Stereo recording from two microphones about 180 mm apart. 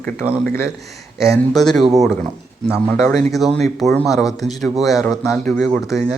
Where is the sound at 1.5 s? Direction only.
Centre (ahead or behind).